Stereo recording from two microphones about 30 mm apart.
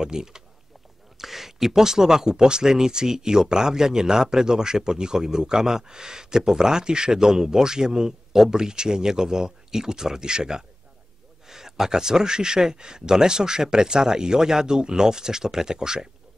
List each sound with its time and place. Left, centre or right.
0.0 s speech: centre
1.1 s speech: centre; by 10.6 s right
11.4 s speech: centre